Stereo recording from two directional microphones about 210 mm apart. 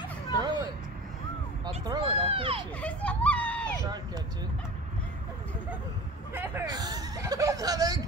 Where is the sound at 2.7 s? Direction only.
5° left (ahead or behind).